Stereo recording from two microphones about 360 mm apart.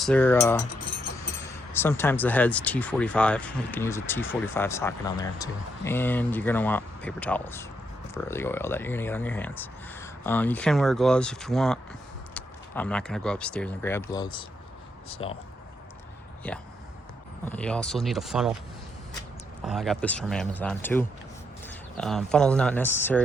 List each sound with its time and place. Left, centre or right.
0.0 s speech: centre
16.4 s speech: centre
19.6 s speech: centre